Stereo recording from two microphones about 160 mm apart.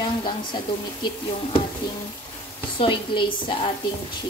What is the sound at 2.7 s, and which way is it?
Speech, 30° left (ahead or behind).